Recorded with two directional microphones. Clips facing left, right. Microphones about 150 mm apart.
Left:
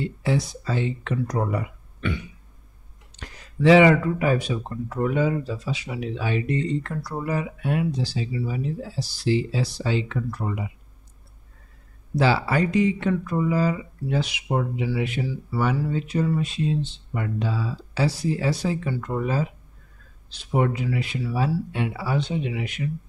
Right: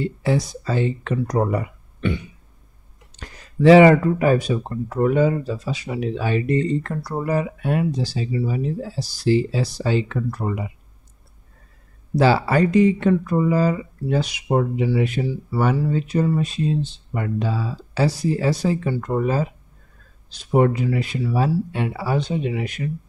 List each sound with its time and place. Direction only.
0.0 s speech: 40° right (ahead or behind)
3.2 s speech: 40° right (ahead or behind)
12.2 s speech: 45° right (ahead or behind)